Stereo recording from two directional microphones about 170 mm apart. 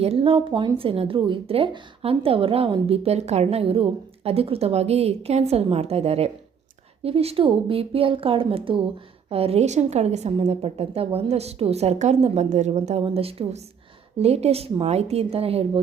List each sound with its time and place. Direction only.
0.0 s speech: 35° right (ahead or behind)